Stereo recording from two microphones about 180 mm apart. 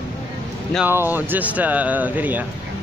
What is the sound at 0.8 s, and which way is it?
Speech, 10° right (ahead or behind).